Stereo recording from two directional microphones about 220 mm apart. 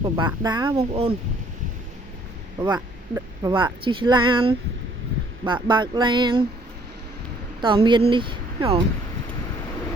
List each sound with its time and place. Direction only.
0.0 s speech: 20° right (ahead or behind)
2.6 s speech: 20° right (ahead or behind)
7.6 s speech: 20° right (ahead or behind)